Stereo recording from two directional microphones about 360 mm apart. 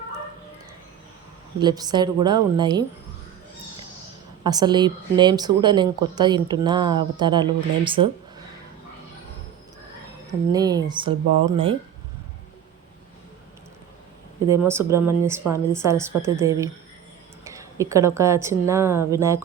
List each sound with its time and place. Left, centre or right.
1.5 s speech: centre
4.4 s speech: centre
10.5 s speech: centre
11.3 s speech: right
11.5 s speech: centre
14.5 s speech: centre